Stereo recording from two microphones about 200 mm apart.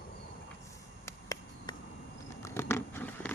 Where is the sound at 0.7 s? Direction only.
15° left (ahead or behind).